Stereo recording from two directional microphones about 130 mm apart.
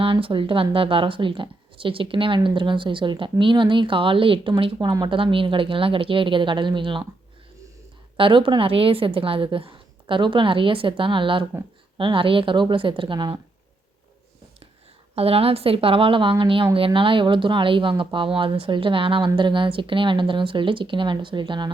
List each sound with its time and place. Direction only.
0.0 s speech: 45° right (ahead or behind)
8.1 s speech: 40° right (ahead or behind)
15.1 s speech: 50° right (ahead or behind)